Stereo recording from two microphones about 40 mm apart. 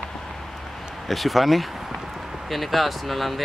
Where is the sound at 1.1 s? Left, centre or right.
Centre.